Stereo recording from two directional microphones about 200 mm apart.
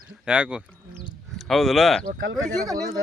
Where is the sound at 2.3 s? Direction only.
20° right (ahead or behind).